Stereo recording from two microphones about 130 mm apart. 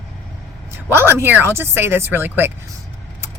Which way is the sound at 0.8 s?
15° right (ahead or behind).